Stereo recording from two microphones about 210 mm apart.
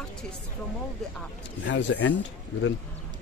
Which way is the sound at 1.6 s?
60° left (ahead or behind).